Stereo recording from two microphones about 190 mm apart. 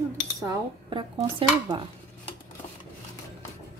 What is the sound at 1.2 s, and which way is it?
Speech, 25° right (ahead or behind).